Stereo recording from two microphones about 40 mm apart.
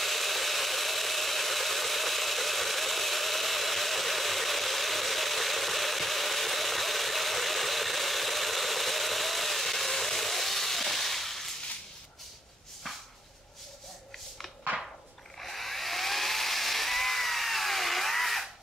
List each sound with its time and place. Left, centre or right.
0.0 s engine: centre
15.3 s hair dryer: centre